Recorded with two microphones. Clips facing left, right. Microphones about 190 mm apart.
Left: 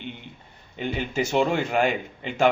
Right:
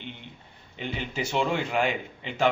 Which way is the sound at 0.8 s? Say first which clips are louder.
Left 5 dB; 45° left (ahead or behind).